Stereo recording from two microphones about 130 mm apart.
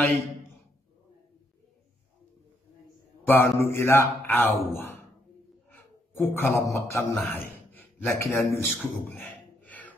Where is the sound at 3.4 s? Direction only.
20° left (ahead or behind).